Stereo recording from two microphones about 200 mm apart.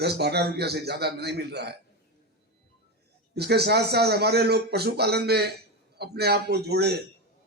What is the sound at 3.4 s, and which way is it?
A man's voice, 55° right (ahead or behind).